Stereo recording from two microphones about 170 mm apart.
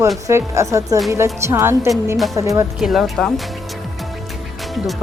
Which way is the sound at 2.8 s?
Centre (ahead or behind).